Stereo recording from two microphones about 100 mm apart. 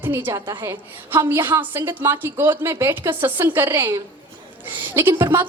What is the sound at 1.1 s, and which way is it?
A woman's voice, 20° right (ahead or behind).